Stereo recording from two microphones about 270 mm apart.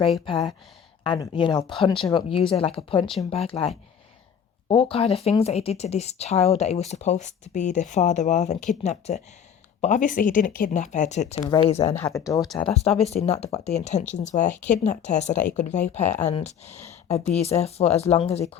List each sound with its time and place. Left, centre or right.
1.0 s speech: centre
11.9 s speech: centre
12.4 s speech: centre
12.7 s speech: left